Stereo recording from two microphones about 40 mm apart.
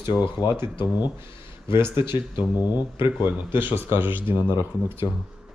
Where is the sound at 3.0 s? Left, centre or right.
Right.